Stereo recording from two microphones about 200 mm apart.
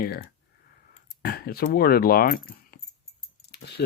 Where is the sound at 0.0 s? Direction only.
45° left (ahead or behind).